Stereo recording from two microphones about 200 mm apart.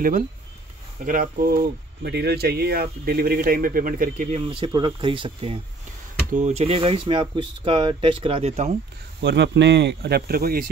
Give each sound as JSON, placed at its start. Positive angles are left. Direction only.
{"t": 1.0, "sound": "speech", "side_deg": -40}
{"t": 4.5, "sound": "speech", "side_deg": -25}
{"t": 9.2, "sound": "speech", "side_deg": -60}